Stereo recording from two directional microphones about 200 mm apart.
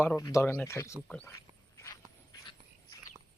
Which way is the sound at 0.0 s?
15° left (ahead or behind).